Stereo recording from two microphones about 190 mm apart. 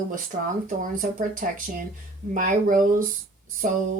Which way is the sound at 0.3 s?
40° right (ahead or behind).